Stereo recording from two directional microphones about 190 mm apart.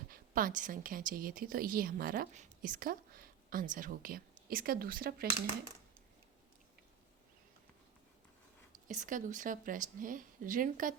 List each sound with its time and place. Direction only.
0.1 s a woman's voice: 45° right (ahead or behind)
8.9 s a woman's voice: 40° right (ahead or behind)